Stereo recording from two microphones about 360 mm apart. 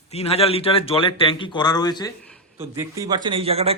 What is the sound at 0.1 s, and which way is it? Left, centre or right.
Speech, centre.